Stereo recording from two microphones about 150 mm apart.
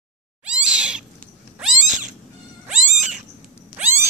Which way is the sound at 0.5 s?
5° right (ahead or behind).